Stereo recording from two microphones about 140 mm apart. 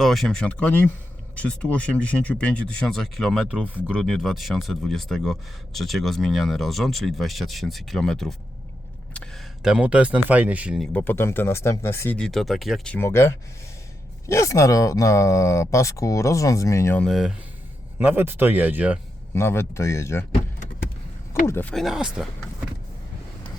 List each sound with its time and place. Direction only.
0.0 s speech: centre (ahead or behind)
10.9 s speech: 15° left (ahead or behind)
13.0 s speech: 20° left (ahead or behind)
17.0 s speech: centre (ahead or behind)
18.0 s speech: 15° right (ahead or behind)
19.3 s speech: 20° left (ahead or behind)
21.4 s speech: 15° left (ahead or behind)
21.8 s speech: 5° right (ahead or behind)